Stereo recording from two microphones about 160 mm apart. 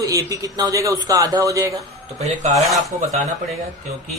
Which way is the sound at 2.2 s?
45° right (ahead or behind).